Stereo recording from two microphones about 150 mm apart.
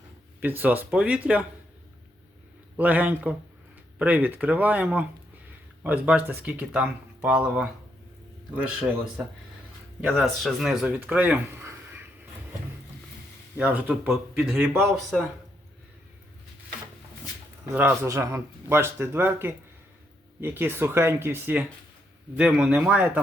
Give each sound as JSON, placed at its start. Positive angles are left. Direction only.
{"t": 0.3, "sound": "a man's voice", "side_deg": -15}
{"t": 2.7, "sound": "a man's voice", "side_deg": -10}
{"t": 13.6, "sound": "a man's voice", "side_deg": -10}
{"t": 17.7, "sound": "a man's voice", "side_deg": -15}